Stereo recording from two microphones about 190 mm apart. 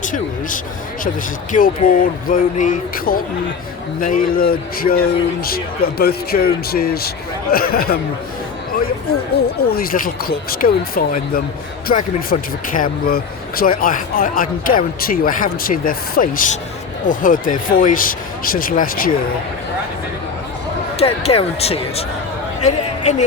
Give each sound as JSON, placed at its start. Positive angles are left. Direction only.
{"t": 0.0, "sound": "speech", "side_deg": 45}
{"t": 9.6, "sound": "speech", "side_deg": 55}
{"t": 21.0, "sound": "speech", "side_deg": 35}
{"t": 22.6, "sound": "a sound", "side_deg": 35}